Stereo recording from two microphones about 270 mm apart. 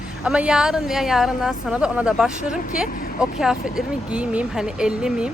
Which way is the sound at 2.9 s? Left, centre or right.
Left.